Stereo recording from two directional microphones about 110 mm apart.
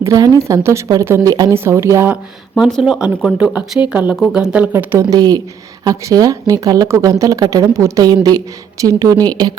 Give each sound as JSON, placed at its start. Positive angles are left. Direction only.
{"t": 0.0, "sound": "a woman's voice", "side_deg": -30}
{"t": 1.5, "sound": "a woman's voice", "side_deg": -25}
{"t": 2.6, "sound": "speech", "side_deg": 0}
{"t": 4.7, "sound": "a woman's voice", "side_deg": -20}
{"t": 5.1, "sound": "speech", "side_deg": -35}